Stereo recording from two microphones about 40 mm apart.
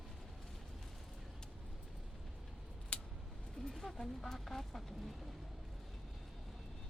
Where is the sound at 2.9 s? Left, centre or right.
Left.